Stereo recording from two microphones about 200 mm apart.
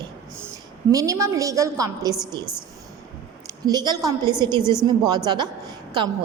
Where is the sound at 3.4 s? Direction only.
20° right (ahead or behind).